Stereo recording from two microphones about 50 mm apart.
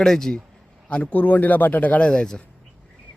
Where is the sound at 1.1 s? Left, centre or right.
Left.